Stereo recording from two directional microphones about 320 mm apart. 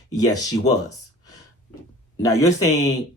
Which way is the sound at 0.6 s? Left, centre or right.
Left.